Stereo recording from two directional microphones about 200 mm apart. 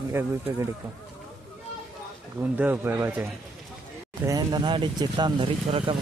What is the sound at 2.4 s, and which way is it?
Speech, 10° right (ahead or behind).